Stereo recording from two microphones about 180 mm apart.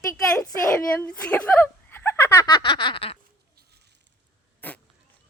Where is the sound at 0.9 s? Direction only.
5° left (ahead or behind); by 3.2 s 30° left (ahead or behind).